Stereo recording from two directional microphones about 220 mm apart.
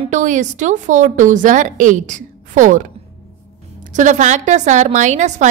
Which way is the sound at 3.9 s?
35° right (ahead or behind).